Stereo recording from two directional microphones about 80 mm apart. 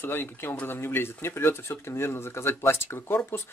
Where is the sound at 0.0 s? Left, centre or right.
Left.